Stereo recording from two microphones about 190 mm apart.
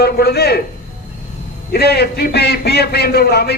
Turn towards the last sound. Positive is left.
turn(degrees=60)  # may be behind; listen again after turning